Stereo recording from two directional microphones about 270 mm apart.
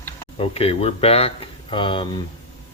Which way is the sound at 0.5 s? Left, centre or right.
Left.